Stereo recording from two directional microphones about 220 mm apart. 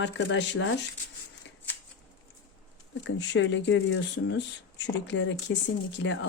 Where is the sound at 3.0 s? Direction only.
55° left (ahead or behind).